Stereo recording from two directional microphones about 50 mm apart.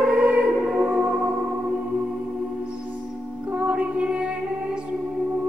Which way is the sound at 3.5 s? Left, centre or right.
Right.